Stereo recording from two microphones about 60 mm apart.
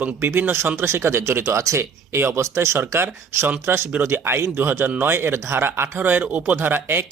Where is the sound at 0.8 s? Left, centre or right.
Right.